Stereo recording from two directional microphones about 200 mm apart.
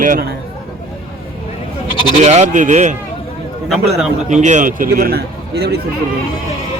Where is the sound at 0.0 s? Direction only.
45° right (ahead or behind).